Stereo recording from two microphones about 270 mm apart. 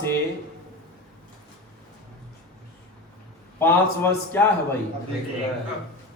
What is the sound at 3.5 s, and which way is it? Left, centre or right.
Speech, centre.